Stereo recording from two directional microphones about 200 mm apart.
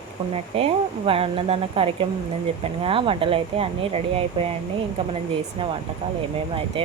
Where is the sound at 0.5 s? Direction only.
30° right (ahead or behind).